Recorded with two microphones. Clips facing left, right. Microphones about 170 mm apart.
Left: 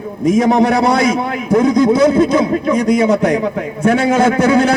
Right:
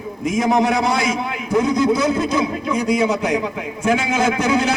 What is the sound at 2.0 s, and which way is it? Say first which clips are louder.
Speech: left 8 dB; 55° left (ahead or behind).